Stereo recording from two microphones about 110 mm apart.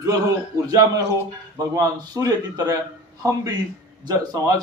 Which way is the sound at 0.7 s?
30° right (ahead or behind).